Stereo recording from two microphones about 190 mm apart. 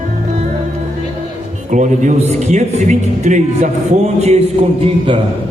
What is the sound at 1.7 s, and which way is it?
Speech, 40° right (ahead or behind).